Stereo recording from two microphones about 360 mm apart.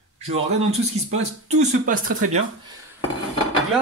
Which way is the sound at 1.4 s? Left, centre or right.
Right.